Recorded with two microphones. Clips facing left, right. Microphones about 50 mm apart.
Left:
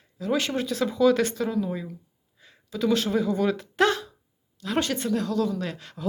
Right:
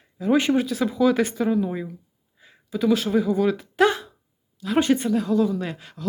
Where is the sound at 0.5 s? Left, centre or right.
Centre.